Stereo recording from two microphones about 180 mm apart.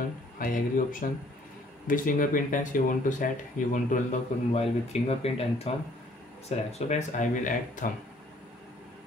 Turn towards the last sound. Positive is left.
turn(degrees=45)  # may be behind; listen again after turning